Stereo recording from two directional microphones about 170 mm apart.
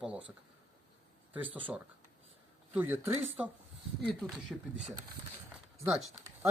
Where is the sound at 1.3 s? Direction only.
10° right (ahead or behind).